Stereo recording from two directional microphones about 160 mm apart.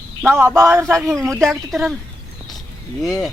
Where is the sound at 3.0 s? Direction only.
Centre (ahead or behind).